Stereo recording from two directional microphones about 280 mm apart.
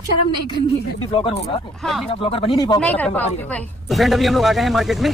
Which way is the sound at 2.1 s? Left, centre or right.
Centre.